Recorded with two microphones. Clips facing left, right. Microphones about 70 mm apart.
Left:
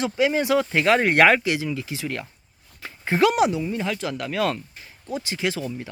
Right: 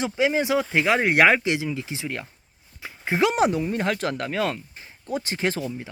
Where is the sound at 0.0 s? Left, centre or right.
Centre.